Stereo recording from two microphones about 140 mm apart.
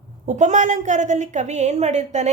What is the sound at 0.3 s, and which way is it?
A woman's voice, 60° right (ahead or behind).